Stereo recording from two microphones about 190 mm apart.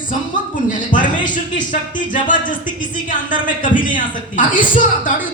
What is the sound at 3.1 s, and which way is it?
A woman's voice, 45° left (ahead or behind).